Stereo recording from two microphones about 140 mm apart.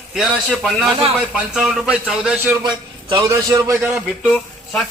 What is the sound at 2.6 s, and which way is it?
A man's voice, 30° right (ahead or behind).